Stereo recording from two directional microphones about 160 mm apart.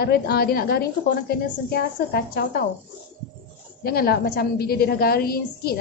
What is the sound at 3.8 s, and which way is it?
A woman's voice, 70° left (ahead or behind).